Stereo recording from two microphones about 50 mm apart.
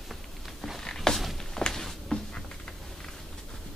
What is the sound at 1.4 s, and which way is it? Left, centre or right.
Walk, centre.